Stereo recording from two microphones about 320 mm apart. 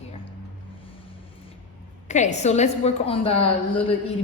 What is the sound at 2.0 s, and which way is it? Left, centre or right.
A woman's voice, left.